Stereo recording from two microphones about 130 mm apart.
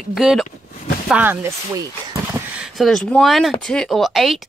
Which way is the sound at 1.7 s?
25° right (ahead or behind).